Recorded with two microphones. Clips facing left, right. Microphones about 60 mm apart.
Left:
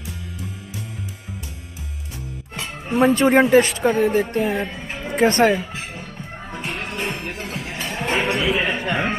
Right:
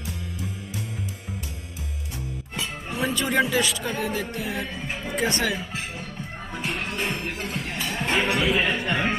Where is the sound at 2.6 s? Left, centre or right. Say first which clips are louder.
Left 9 dB; left.